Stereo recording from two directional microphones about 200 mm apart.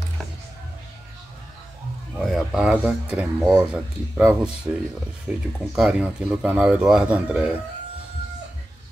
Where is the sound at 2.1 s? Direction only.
Centre (ahead or behind).